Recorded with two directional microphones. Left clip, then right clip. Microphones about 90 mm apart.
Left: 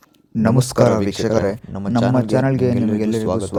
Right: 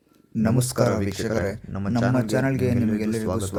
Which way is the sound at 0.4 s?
60° left (ahead or behind).